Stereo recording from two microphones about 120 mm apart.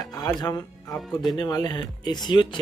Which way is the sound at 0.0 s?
35° left (ahead or behind).